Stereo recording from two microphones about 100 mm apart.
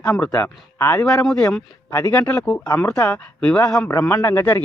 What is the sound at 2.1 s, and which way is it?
Speech, 20° left (ahead or behind).